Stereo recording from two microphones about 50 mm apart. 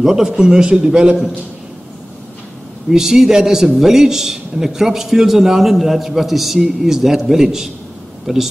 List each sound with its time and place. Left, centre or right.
0.0 s a man's voice: centre
2.9 s a man's voice: centre